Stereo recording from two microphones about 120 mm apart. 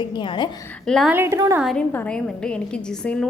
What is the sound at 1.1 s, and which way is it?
Speech, 20° right (ahead or behind).